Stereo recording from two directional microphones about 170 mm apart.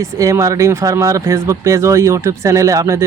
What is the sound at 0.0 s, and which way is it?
Speech, 15° right (ahead or behind).